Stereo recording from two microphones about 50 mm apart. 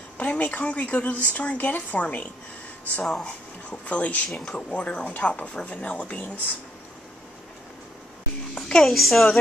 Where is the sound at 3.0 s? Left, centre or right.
Centre.